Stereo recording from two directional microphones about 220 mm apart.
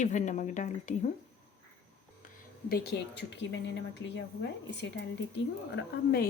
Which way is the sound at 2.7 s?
45° left (ahead or behind).